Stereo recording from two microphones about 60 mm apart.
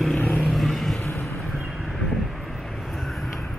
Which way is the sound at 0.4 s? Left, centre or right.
Centre.